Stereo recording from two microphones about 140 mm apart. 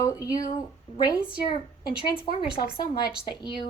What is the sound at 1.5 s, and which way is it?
Speech, 30° left (ahead or behind).